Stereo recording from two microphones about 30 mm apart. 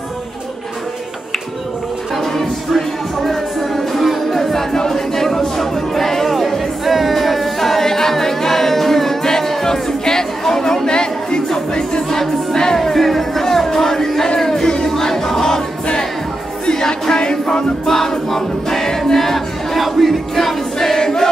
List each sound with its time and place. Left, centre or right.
3.2 s music: centre
10.9 s chatter: left
12.1 s music: centre
16.8 s music: centre
17.2 s music: left
17.8 s choir: centre
19.1 s music: centre
21.0 s choir: centre